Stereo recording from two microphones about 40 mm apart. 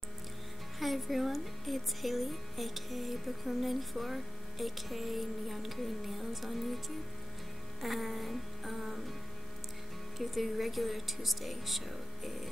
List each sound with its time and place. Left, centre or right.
0.7 s speech: centre
7.8 s speech: centre
10.1 s speech: centre